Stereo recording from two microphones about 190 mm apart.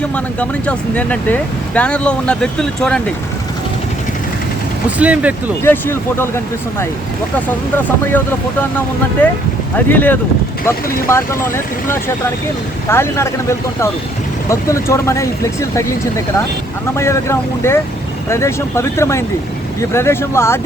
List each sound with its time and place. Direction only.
0.3 s speech: 5° left (ahead or behind)
4.9 s speech: 5° right (ahead or behind)
5.6 s speech: 10° left (ahead or behind)
9.2 s speech: 10° left (ahead or behind)